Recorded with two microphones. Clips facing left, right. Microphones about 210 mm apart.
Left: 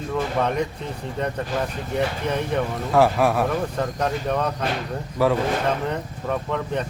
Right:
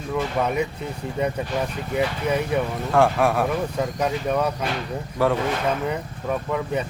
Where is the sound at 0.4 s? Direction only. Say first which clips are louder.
Even; 5° right (ahead or behind).